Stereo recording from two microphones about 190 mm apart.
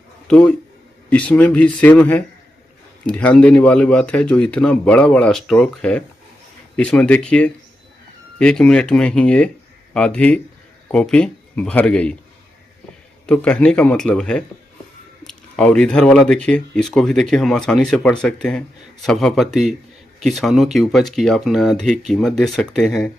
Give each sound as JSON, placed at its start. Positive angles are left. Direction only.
{"t": 0.3, "sound": "speech", "side_deg": 5}
{"t": 13.2, "sound": "speech", "side_deg": 5}